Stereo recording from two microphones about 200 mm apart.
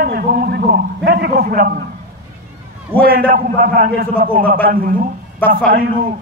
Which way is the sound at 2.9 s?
50° right (ahead or behind).